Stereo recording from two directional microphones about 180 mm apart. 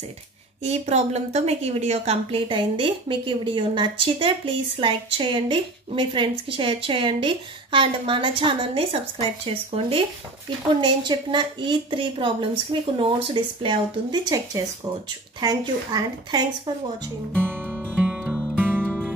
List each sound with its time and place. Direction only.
0.7 s a woman's voice: 35° right (ahead or behind)
17.3 s music: 10° right (ahead or behind)